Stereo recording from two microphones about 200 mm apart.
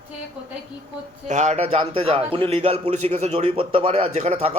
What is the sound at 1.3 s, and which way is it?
A man's voice, 35° right (ahead or behind).